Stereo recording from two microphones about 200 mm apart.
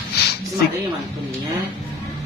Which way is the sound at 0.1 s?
55° left (ahead or behind).